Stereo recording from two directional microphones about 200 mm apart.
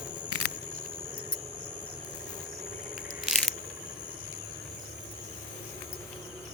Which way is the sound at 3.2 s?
Centre (ahead or behind).